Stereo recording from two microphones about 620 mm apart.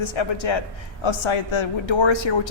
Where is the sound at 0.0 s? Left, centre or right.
Left.